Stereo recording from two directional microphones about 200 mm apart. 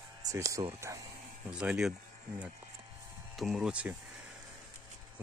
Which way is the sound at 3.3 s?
Centre (ahead or behind).